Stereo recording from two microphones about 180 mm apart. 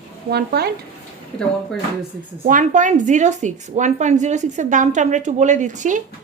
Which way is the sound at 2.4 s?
45° right (ahead or behind).